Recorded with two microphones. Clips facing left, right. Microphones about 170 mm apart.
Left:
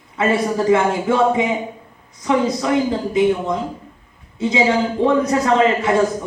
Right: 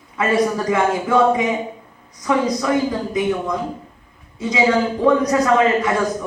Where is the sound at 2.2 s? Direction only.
25° left (ahead or behind).